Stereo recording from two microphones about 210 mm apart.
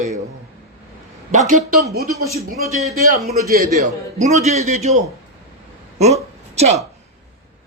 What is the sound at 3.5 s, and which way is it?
A man's voice, 35° right (ahead or behind).